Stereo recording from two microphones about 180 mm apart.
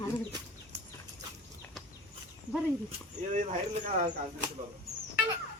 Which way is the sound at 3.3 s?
40° right (ahead or behind).